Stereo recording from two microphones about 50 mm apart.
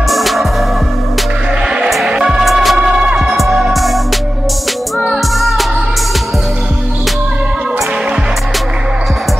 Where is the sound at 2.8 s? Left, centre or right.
Centre.